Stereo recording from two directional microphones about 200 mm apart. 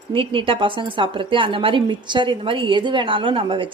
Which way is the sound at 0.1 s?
25° right (ahead or behind).